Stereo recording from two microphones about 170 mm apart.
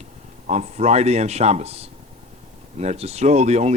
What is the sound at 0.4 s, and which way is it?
Speech, 40° right (ahead or behind).